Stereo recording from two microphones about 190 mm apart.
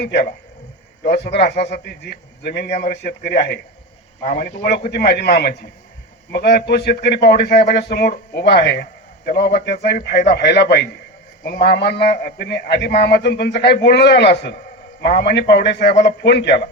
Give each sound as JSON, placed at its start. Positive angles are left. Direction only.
{"t": 0.0, "sound": "a man's voice", "side_deg": 60}
{"t": 4.2, "sound": "a man's voice", "side_deg": 45}
{"t": 4.7, "sound": "a man's voice", "side_deg": 60}